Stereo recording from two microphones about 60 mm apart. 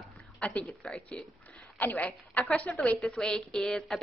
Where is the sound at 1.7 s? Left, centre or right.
Left.